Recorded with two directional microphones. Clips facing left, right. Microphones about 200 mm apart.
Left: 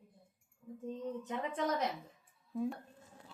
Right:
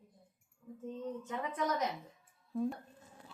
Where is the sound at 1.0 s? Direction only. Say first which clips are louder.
Even; 20° left (ahead or behind).